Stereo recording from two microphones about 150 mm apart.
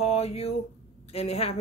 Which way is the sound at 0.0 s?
40° left (ahead or behind).